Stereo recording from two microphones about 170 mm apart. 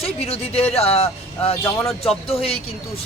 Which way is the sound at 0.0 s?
35° left (ahead or behind).